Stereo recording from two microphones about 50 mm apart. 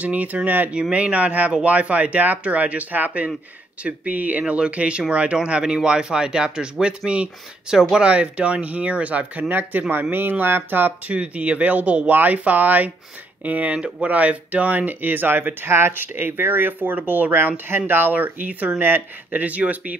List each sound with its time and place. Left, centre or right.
0.0 s speech: right
0.7 s speech: right
8.1 s speech: right
11.1 s speech: right
17.3 s speech: right
18.8 s speech: right
19.4 s speech: right